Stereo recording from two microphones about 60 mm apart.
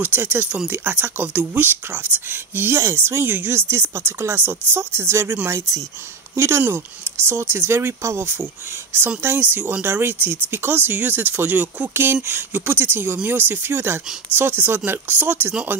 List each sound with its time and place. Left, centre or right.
0.0 s speech: right
5.5 s speech: right
6.3 s speech: right
11.9 s speech: right